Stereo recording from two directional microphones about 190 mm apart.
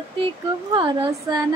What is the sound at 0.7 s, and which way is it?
Speech, 25° right (ahead or behind).